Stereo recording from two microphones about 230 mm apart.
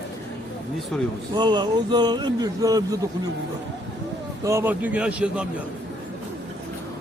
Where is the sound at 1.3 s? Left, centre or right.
Centre.